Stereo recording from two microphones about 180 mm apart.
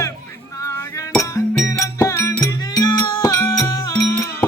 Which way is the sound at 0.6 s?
15° left (ahead or behind).